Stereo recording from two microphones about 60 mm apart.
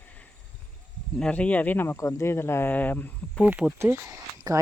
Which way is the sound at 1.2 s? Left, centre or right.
Left.